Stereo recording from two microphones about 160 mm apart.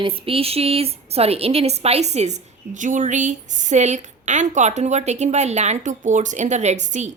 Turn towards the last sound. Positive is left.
turn(degrees=-50)  # may be behind; listen again after turning